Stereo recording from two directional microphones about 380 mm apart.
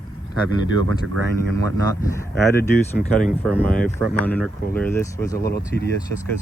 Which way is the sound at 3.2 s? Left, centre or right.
Centre.